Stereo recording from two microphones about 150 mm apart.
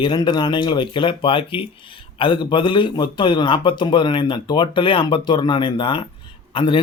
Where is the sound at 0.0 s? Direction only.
30° left (ahead or behind).